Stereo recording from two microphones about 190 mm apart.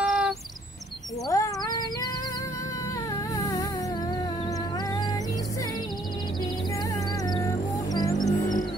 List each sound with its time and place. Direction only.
0.0 s bird: centre (ahead or behind)
1.3 s cat: 20° left (ahead or behind)
3.3 s a sound: 20° left (ahead or behind)
7.2 s music: 20° left (ahead or behind)